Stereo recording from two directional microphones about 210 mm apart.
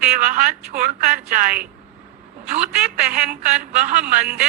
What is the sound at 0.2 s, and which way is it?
A man's voice, 35° right (ahead or behind).